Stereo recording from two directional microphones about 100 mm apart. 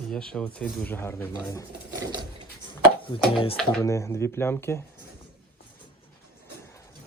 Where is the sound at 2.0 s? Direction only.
45° right (ahead or behind).